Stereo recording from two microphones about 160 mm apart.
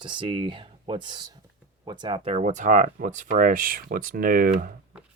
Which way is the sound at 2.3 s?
50° right (ahead or behind).